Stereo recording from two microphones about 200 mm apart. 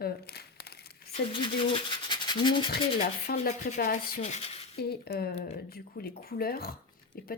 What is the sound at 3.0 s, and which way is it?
Speech, 40° left (ahead or behind).